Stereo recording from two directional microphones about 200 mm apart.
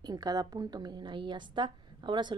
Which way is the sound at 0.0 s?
20° right (ahead or behind).